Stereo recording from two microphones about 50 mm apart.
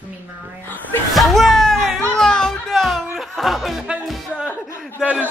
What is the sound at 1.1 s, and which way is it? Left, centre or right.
Speech, centre.